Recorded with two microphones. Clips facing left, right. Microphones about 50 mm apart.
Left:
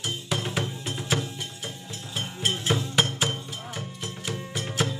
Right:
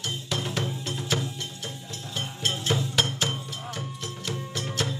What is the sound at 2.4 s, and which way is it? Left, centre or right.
Music, centre.